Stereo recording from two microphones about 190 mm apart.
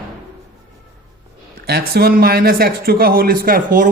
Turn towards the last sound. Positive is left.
turn(degrees=-45)  # may be behind; listen again after turning